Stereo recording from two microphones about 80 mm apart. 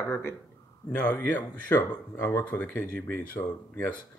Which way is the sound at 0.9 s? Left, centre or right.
Centre.